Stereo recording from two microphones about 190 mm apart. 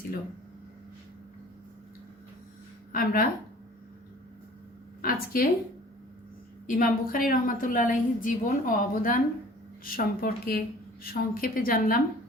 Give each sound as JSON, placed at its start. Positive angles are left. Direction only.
{"t": 2.9, "sound": "a woman's voice", "side_deg": 50}
{"t": 5.0, "sound": "a woman's voice", "side_deg": 50}
{"t": 6.7, "sound": "a woman's voice", "side_deg": 45}